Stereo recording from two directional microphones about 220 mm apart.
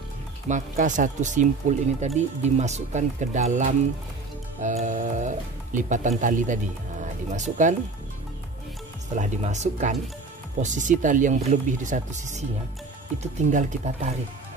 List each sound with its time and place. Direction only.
0.5 s speech: 35° right (ahead or behind)
9.1 s speech: 35° right (ahead or behind)